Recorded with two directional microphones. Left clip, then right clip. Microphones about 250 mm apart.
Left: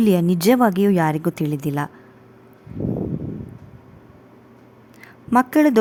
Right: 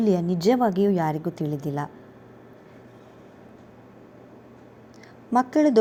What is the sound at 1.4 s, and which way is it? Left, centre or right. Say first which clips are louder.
Speech: left 5 dB; left.